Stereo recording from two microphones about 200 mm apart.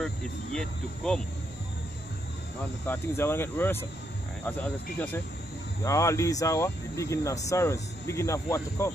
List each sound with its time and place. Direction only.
0.0 s speech: 5° left (ahead or behind)
2.9 s speech: 10° left (ahead or behind)